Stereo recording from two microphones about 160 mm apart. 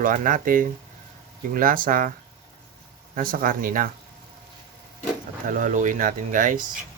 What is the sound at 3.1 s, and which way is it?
Speech, 60° right (ahead or behind).